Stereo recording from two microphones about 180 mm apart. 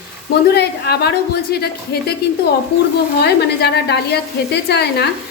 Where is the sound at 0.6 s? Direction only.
65° left (ahead or behind).